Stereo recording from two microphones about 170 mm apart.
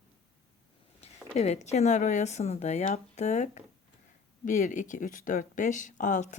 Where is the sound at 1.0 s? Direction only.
40° left (ahead or behind).